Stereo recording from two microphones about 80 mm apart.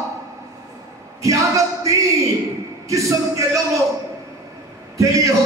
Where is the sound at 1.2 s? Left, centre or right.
Right.